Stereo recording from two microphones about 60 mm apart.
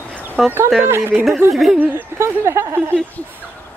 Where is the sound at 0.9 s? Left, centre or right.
Right.